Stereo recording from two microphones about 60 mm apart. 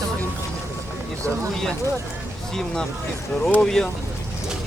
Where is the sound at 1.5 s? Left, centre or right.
Centre.